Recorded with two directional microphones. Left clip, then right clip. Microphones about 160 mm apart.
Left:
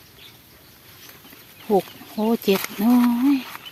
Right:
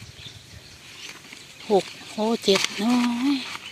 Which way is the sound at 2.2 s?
30° left (ahead or behind).